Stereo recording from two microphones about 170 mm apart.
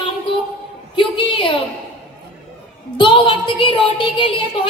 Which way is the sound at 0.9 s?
30° left (ahead or behind).